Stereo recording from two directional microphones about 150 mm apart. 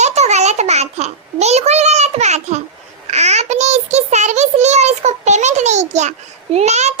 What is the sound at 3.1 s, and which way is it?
A child's voice, 50° right (ahead or behind).